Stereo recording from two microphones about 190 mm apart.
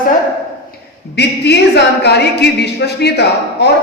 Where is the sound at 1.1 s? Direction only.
60° left (ahead or behind).